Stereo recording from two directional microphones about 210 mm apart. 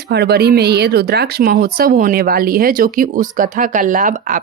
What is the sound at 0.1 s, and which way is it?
A woman's voice, 50° right (ahead or behind).